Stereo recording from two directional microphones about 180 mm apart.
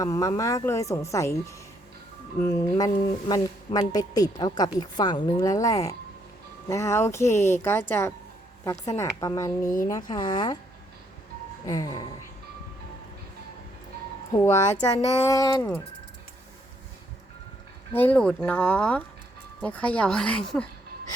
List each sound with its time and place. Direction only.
0.0 s speech: 20° left (ahead or behind)
11.6 s speech: 20° left (ahead or behind)
14.9 s speech: 20° left (ahead or behind)
17.9 s speech: 10° left (ahead or behind)